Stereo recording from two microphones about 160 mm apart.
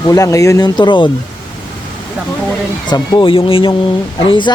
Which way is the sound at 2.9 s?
30° left (ahead or behind).